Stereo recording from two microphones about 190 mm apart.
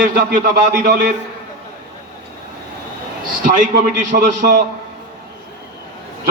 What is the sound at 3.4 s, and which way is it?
Speech, 40° right (ahead or behind).